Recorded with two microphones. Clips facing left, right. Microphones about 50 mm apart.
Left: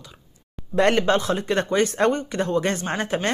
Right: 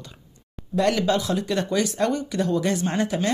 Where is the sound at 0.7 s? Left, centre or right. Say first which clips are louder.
Left 2 dB; left.